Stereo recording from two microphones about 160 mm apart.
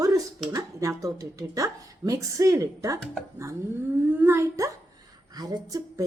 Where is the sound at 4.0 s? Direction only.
10° right (ahead or behind).